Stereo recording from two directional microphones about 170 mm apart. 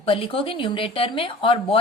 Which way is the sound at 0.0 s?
30° left (ahead or behind).